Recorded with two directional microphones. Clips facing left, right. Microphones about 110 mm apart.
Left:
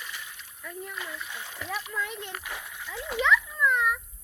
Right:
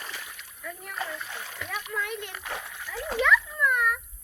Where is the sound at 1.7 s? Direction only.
25° left (ahead or behind).